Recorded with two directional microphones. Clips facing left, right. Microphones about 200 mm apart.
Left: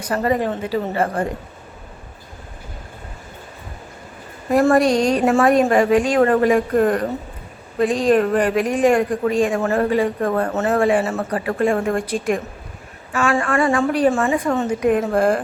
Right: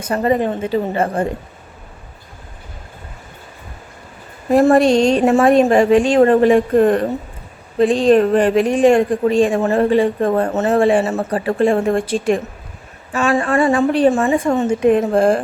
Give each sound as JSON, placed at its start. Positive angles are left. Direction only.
{"t": 0.0, "sound": "speech", "side_deg": -25}
{"t": 4.5, "sound": "speech", "side_deg": -25}